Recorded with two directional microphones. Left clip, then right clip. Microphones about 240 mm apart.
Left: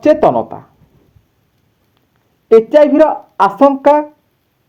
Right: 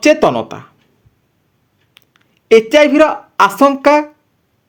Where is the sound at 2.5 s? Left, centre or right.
Right.